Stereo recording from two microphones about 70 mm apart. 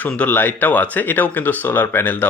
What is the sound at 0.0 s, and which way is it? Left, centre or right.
Speech, left.